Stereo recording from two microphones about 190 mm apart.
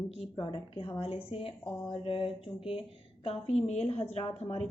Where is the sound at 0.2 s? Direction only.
25° left (ahead or behind).